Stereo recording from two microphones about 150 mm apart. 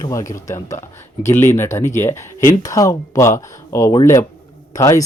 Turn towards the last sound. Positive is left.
turn(degrees=20)  # may be behind; listen again after turning